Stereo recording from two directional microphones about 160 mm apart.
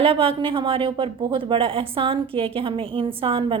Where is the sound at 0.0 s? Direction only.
35° right (ahead or behind).